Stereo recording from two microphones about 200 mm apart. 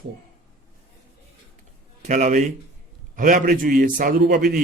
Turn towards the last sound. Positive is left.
turn(degrees=-55)  # may be behind; listen again after turning